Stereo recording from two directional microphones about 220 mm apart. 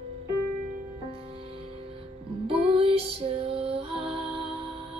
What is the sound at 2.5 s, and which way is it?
Music, 25° right (ahead or behind).